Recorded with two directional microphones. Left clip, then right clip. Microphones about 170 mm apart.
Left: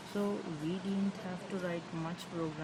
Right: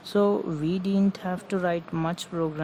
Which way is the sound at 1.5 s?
65° right (ahead or behind).